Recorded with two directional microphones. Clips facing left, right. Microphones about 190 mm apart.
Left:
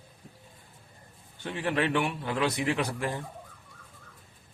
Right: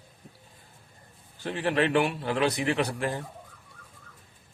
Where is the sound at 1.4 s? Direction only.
35° right (ahead or behind).